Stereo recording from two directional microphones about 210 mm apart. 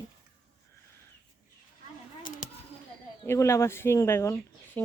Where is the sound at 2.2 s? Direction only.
40° left (ahead or behind).